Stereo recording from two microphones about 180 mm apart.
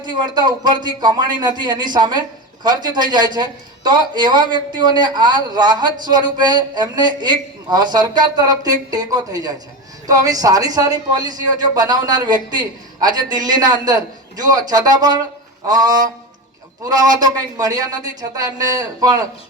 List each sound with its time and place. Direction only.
0.0 s a man's voice: 25° right (ahead or behind)